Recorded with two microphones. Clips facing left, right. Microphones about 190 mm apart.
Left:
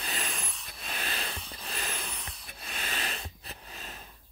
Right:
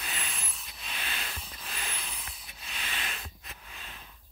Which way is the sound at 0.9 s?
40° left (ahead or behind).